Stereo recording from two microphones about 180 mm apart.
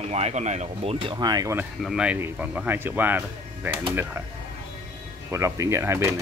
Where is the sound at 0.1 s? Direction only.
35° right (ahead or behind); by 1.7 s 15° right (ahead or behind).